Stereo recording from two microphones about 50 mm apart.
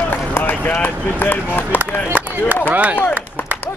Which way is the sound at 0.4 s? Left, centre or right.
Left.